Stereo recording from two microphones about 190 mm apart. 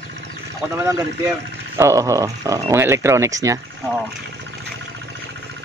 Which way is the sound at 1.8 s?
15° right (ahead or behind).